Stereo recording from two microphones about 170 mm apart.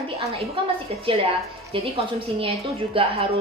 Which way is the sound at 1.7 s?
30° right (ahead or behind).